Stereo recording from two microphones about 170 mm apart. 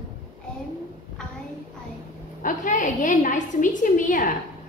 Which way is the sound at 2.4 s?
50° left (ahead or behind).